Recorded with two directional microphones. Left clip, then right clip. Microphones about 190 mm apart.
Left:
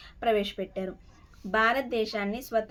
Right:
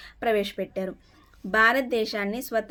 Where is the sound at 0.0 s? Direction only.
45° right (ahead or behind).